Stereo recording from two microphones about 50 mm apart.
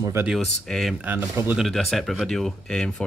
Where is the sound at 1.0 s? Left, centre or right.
Right.